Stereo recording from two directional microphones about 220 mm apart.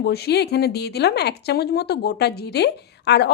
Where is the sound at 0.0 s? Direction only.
45° left (ahead or behind).